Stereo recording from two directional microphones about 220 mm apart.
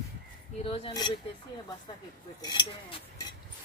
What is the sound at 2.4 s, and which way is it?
Speech, 20° left (ahead or behind).